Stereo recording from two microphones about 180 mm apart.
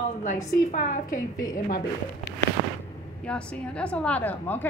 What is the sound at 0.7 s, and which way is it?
A woman's voice, 45° left (ahead or behind).